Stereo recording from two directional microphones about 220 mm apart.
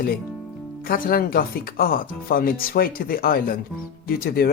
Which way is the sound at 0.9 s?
40° left (ahead or behind).